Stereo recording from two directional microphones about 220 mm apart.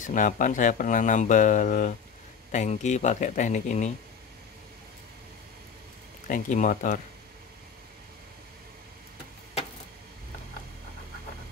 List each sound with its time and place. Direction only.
0.0 s speech: 35° left (ahead or behind)
6.2 s speech: 35° left (ahead or behind)